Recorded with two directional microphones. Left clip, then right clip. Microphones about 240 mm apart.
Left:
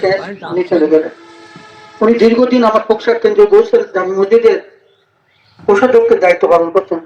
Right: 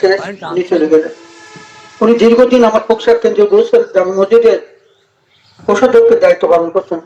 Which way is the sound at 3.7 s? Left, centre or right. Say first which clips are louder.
Right 3 dB; right.